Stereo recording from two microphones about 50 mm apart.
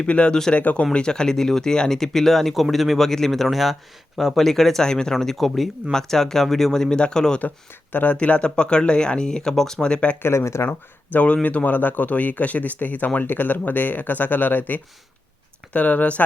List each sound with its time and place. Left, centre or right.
0.1 s speech: left
0.9 s speech: centre
10.2 s speech: left
10.7 s speech: left
15.7 s speech: left